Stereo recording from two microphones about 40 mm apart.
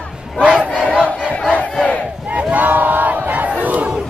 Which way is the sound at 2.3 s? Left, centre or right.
Right.